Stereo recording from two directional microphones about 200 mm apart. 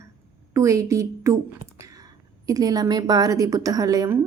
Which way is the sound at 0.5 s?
15° right (ahead or behind).